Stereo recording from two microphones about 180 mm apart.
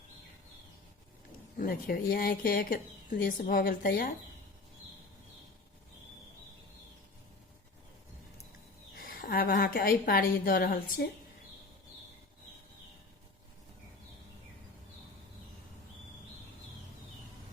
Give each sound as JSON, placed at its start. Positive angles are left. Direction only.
{"t": 1.5, "sound": "speech", "side_deg": 55}
{"t": 9.0, "sound": "a woman's voice", "side_deg": 55}